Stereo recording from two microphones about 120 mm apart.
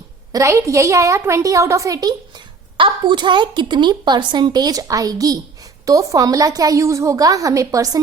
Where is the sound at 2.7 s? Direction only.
40° right (ahead or behind).